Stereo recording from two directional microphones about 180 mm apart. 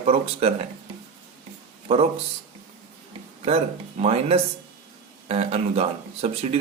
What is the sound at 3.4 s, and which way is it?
Speech, 35° right (ahead or behind).